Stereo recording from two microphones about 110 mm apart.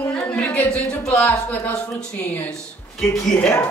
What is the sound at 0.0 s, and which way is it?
Speech, 10° left (ahead or behind).